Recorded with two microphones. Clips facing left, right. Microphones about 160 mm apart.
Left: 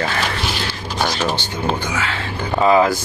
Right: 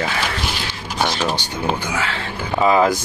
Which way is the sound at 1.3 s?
10° right (ahead or behind).